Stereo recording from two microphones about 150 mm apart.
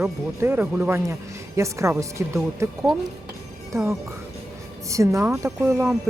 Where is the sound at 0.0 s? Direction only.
15° right (ahead or behind).